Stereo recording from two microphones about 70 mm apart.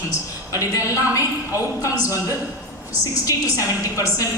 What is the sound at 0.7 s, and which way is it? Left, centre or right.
Speech, left.